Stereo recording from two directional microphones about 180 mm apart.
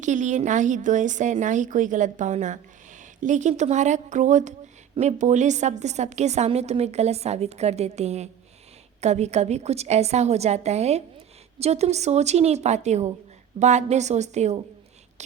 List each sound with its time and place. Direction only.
0.0 s a woman's voice: 45° right (ahead or behind)